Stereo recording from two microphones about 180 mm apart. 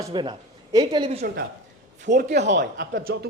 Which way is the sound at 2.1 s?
60° right (ahead or behind).